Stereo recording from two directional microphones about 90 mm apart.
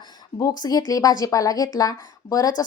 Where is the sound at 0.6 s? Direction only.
45° left (ahead or behind).